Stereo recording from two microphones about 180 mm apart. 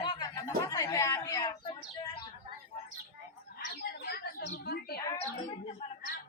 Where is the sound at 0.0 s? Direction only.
25° left (ahead or behind).